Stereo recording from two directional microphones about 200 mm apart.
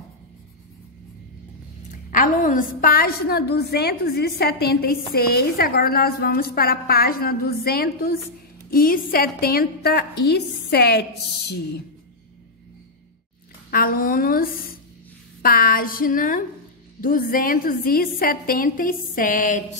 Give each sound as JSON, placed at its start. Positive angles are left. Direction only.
{"t": 1.9, "sound": "a woman's voice", "side_deg": 40}
{"t": 13.7, "sound": "a woman's voice", "side_deg": 45}